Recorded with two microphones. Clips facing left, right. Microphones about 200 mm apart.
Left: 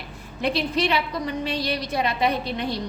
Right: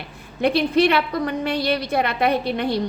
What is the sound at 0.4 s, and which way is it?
A woman's voice, 55° right (ahead or behind).